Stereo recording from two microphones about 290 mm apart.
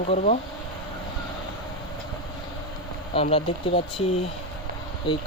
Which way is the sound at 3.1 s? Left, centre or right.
Left.